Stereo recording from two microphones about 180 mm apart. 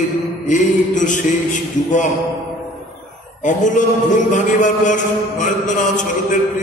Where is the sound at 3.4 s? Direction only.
45° left (ahead or behind).